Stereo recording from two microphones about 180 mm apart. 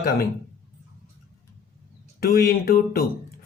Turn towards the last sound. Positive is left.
turn(degrees=55)  # may be behind; listen again after turning